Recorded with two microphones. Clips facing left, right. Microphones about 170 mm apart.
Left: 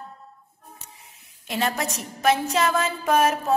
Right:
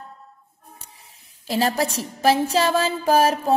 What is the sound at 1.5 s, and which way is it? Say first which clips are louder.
A woman's voice: right 5 dB; 35° right (ahead or behind).